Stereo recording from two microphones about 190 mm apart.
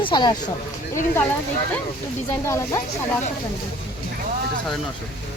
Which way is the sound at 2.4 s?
15° left (ahead or behind).